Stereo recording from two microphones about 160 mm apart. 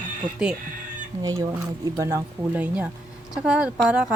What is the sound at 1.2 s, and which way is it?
A woman's voice, 25° right (ahead or behind).